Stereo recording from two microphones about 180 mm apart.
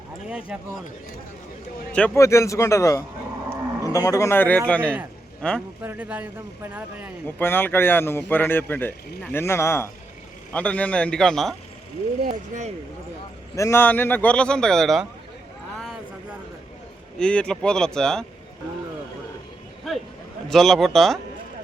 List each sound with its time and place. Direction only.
0.3 s speech: 5° right (ahead or behind)
1.9 s speech: 5° left (ahead or behind)
5.8 s speech: 10° right (ahead or behind)
7.3 s speech: 10° left (ahead or behind)
12.2 s speech: 45° right (ahead or behind)
13.6 s speech: 15° left (ahead or behind)
17.2 s speech: 5° left (ahead or behind)
20.5 s speech: centre (ahead or behind)